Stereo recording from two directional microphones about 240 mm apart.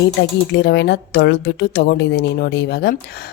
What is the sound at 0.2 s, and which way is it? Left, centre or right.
Speech, left.